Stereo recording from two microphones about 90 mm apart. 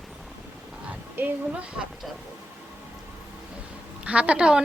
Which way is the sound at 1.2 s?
25° right (ahead or behind).